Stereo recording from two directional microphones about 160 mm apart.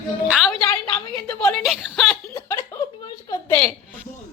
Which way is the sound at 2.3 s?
20° left (ahead or behind).